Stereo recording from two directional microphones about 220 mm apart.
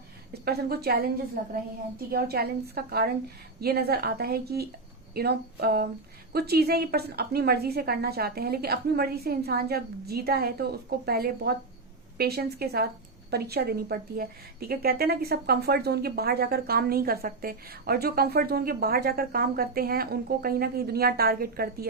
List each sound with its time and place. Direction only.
0.4 s a woman's voice: 45° right (ahead or behind)